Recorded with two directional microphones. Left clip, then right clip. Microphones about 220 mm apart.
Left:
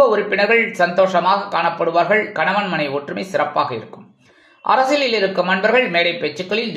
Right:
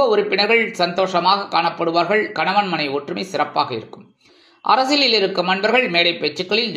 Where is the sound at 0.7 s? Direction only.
20° right (ahead or behind).